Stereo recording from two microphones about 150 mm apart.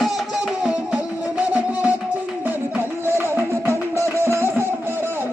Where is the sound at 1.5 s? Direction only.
10° right (ahead or behind).